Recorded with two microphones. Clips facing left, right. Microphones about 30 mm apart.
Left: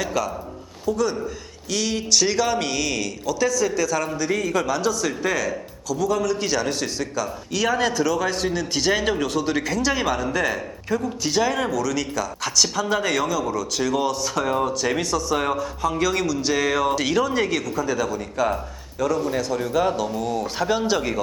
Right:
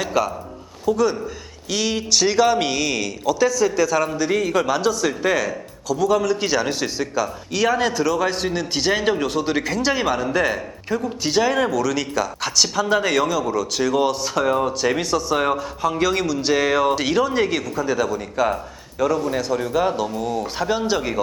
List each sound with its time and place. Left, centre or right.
0.0 s speech: centre
0.9 s a man's voice: centre
14.3 s a man's voice: centre